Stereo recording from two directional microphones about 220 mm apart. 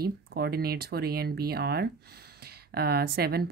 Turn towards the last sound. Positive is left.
turn(degrees=-45)  # may be behind; listen again after turning